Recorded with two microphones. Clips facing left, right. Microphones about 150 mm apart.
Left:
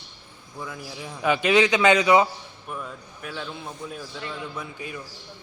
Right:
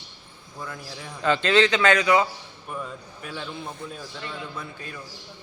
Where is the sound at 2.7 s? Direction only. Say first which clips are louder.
Right 1 dB; centre (ahead or behind).